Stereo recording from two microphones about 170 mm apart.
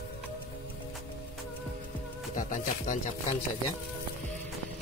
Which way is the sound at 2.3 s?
45° left (ahead or behind).